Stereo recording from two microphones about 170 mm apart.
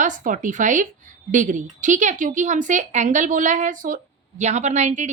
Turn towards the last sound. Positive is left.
turn(degrees=-45)  # may be behind; listen again after turning